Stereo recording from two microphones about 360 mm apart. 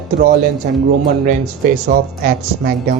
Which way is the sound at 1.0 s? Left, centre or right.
Right.